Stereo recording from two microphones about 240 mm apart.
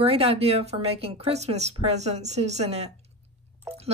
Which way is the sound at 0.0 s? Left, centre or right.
Right.